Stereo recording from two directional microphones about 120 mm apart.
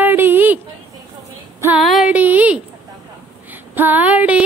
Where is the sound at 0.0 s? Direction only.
15° right (ahead or behind).